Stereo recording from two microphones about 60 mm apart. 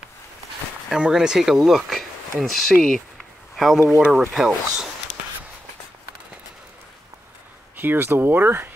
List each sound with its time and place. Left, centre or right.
0.8 s speech: centre
7.7 s speech: right